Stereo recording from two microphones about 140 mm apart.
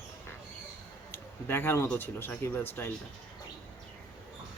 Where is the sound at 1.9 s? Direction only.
15° left (ahead or behind).